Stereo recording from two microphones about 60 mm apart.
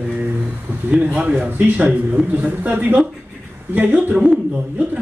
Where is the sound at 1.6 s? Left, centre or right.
Right.